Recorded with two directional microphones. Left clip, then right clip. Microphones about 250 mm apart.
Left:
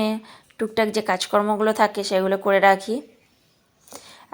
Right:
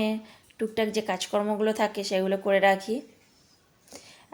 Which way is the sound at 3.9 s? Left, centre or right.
Centre.